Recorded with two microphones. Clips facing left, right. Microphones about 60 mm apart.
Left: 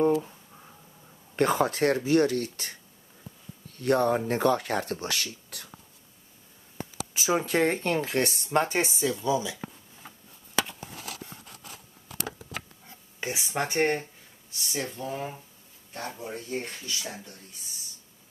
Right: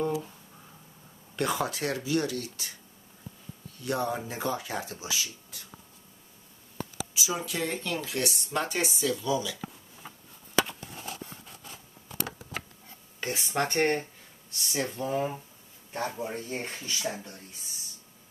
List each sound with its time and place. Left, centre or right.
1.3 s speech: left
7.2 s speech: left
13.2 s speech: centre
16.2 s speech: right